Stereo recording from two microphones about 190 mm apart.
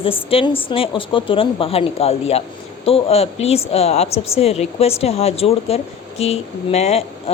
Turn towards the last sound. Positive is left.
turn(degrees=35)  # may be behind; listen again after turning